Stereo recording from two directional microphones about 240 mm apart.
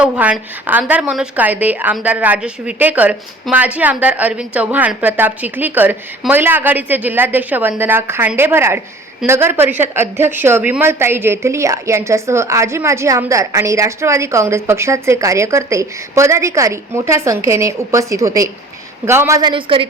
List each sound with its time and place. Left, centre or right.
0.0 s speech: centre; by 19.9 s right